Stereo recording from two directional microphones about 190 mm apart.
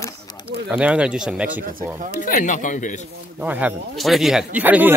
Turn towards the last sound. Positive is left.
turn(degrees=-10)  # may be behind; listen again after turning